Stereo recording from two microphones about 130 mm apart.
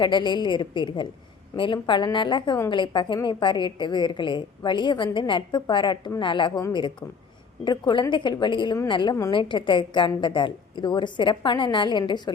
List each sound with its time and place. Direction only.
0.0 s a woman's voice: 35° left (ahead or behind)
7.6 s a woman's voice: 35° left (ahead or behind)